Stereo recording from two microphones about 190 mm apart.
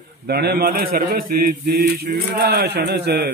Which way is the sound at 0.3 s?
55° right (ahead or behind).